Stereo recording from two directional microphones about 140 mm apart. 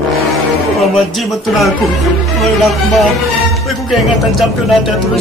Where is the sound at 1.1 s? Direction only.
Centre (ahead or behind).